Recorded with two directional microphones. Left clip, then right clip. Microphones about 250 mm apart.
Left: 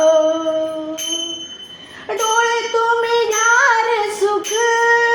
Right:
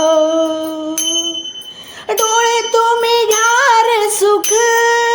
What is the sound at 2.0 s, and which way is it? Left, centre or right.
Child singing, right.